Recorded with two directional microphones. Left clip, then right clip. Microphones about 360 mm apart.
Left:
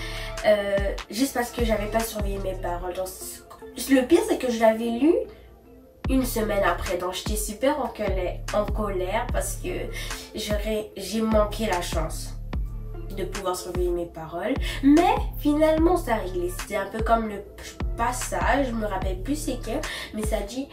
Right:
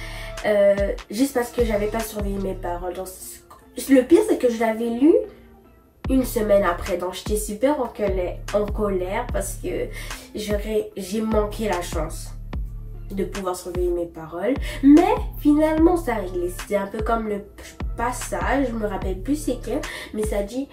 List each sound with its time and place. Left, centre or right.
0.0 s speech: centre
3.7 s speech: centre
13.1 s speech: centre